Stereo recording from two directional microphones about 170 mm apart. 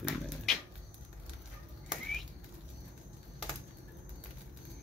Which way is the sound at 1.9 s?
Centre (ahead or behind).